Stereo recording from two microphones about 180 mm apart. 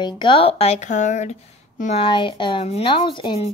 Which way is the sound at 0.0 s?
30° left (ahead or behind).